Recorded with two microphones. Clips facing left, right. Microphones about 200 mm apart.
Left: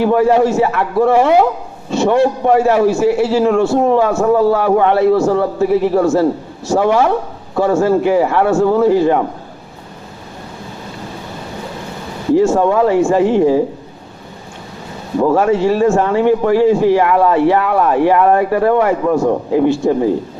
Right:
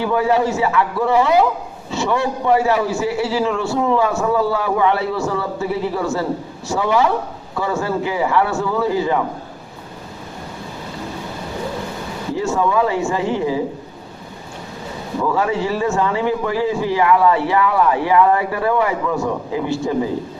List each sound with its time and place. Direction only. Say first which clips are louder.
0.0 s a man's voice: left 6 dB; 55° left (ahead or behind)
12.4 s a man's voice: left 5 dB; 50° left (ahead or behind)
15.3 s a man's voice: left 7 dB; 50° left (ahead or behind)